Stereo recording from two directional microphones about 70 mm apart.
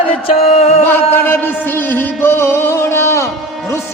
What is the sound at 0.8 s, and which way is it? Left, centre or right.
Music, left.